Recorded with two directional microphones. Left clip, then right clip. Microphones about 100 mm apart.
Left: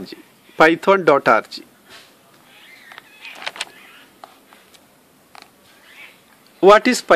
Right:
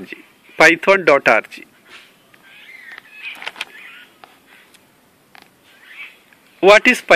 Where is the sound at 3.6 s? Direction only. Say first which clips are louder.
Right 1 dB; 5° right (ahead or behind).